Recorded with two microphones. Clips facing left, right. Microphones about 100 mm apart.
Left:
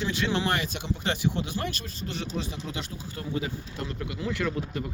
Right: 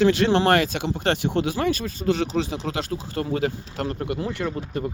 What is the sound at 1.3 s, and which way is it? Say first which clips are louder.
Speech: right 9 dB; 90° right.